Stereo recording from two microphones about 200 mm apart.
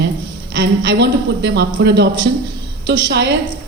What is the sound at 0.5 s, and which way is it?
Speech, 60° right (ahead or behind).